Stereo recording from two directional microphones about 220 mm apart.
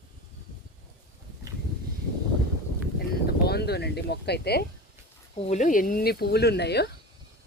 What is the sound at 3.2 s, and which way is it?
Speech, 45° left (ahead or behind).